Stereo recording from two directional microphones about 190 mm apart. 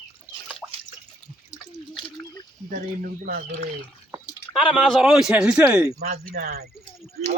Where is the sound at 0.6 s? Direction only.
5° right (ahead or behind).